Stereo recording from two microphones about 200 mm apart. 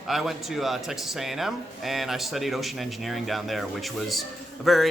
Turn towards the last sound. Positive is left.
turn(degrees=0)  # may be behind; listen again after turning